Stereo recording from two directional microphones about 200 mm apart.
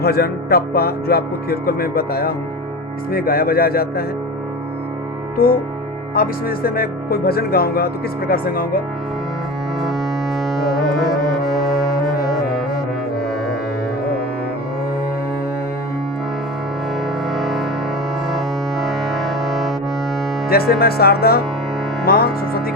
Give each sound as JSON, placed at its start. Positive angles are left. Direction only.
{"t": 0.0, "sound": "speech", "side_deg": 50}
{"t": 5.4, "sound": "speech", "side_deg": 45}
{"t": 10.4, "sound": "music", "side_deg": 0}
{"t": 17.3, "sound": "music", "side_deg": 0}
{"t": 20.5, "sound": "speech", "side_deg": 50}